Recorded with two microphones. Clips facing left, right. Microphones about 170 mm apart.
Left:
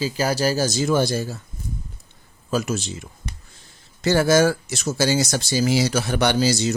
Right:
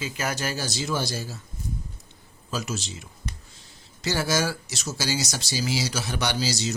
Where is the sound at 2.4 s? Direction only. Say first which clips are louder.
Left 8 dB; 55° left (ahead or behind).